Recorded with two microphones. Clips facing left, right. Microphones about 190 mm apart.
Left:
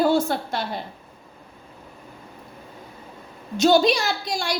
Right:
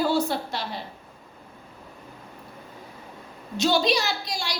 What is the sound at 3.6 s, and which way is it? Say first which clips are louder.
A woman's voice: left 5 dB; 50° left (ahead or behind).